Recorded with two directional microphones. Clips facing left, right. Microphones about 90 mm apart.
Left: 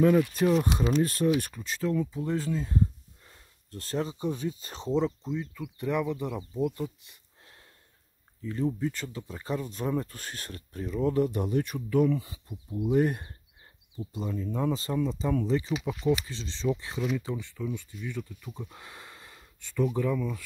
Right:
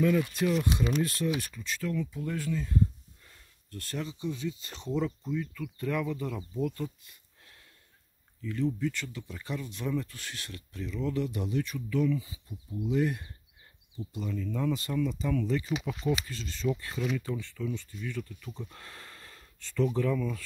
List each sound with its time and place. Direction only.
0.3 s speech: 40° left (ahead or behind)
1.8 s speech: 30° left (ahead or behind); by 12.2 s 45° left (ahead or behind)
12.2 s speech: 65° left (ahead or behind)
12.8 s speech: 50° left (ahead or behind)
13.9 s speech: 35° left (ahead or behind)
15.7 s speech: 5° left (ahead or behind)
16.1 s speech: 25° left (ahead or behind)